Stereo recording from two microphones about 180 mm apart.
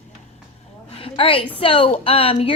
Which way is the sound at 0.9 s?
30° left (ahead or behind).